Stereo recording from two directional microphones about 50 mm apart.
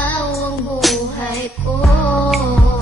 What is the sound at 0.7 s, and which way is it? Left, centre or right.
Music, centre.